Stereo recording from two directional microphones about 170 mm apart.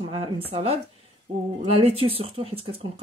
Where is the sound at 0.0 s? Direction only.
35° right (ahead or behind).